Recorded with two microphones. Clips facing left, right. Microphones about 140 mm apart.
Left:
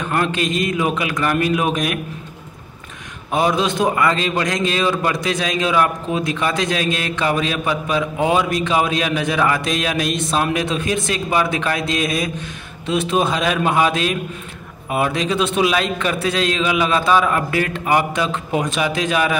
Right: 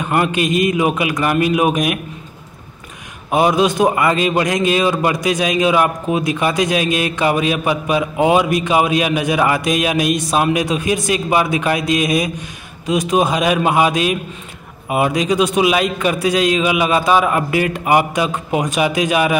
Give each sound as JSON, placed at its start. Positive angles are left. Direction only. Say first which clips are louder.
{"t": 0.0, "sound": "a man's voice", "louder": "right 3 dB", "side_deg": -15}
{"t": 3.3, "sound": "a man's voice", "louder": "right 4 dB", "side_deg": -10}